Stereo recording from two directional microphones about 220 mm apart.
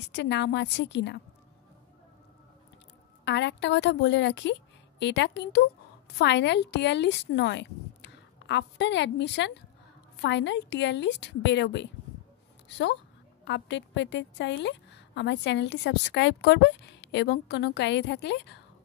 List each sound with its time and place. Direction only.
0.1 s a woman's voice: 50° left (ahead or behind)
3.3 s a woman's voice: 55° left (ahead or behind)